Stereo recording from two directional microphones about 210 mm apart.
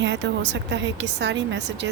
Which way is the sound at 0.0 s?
55° right (ahead or behind).